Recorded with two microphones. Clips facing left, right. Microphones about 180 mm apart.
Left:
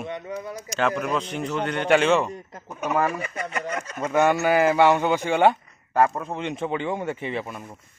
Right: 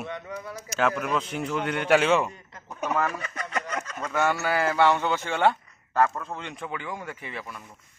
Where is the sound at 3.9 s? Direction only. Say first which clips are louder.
Left 7 dB; 25° left (ahead or behind).